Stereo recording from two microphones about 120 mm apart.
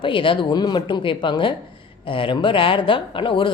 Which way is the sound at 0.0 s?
45° left (ahead or behind).